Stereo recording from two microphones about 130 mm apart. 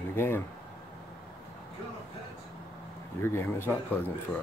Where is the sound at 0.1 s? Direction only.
15° left (ahead or behind).